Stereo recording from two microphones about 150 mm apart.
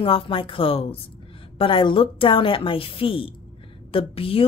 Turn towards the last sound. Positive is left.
turn(degrees=40)  # may be behind; listen again after turning